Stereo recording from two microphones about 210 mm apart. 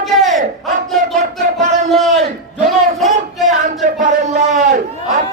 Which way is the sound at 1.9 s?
Centre (ahead or behind).